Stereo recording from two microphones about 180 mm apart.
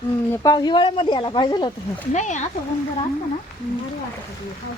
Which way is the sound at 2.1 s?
40° left (ahead or behind).